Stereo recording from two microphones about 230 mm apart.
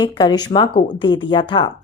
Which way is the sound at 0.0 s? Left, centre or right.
Centre.